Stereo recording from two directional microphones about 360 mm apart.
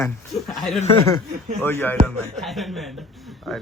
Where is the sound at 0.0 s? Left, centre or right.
Centre.